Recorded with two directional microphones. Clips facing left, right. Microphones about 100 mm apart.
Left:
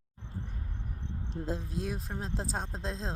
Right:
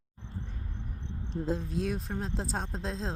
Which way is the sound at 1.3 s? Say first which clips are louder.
Right 4 dB; centre (ahead or behind).